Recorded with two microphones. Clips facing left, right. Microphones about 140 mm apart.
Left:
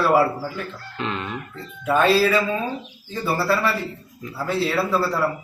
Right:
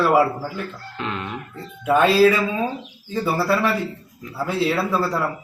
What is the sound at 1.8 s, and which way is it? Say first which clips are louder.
A man's voice: right 3 dB; 15° right (ahead or behind).